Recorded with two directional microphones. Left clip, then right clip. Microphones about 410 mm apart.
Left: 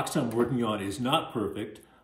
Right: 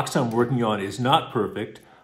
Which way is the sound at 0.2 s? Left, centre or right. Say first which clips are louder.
Right 6 dB; right.